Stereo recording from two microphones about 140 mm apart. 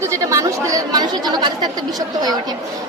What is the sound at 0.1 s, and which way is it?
Speech, 25° right (ahead or behind).